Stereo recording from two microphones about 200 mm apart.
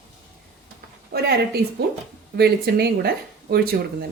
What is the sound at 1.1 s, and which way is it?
Speech, 55° right (ahead or behind).